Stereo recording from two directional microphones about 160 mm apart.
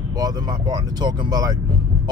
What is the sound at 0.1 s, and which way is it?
Speech, 25° right (ahead or behind).